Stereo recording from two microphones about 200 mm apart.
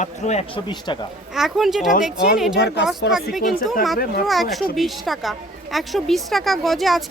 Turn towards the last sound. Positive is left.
turn(degrees=0)  # may be behind; listen again after turning